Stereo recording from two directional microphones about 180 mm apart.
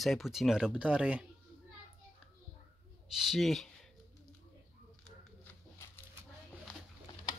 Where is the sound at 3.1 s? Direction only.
Centre (ahead or behind).